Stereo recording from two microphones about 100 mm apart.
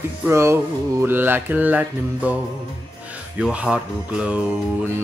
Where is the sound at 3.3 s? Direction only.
10° right (ahead or behind).